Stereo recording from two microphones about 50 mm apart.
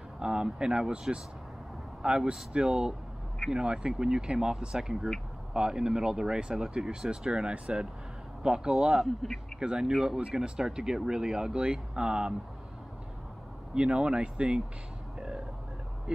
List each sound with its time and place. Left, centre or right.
0.2 s speech: centre
9.0 s a man's voice: centre
9.6 s speech: centre
13.7 s speech: centre
15.1 s burping: centre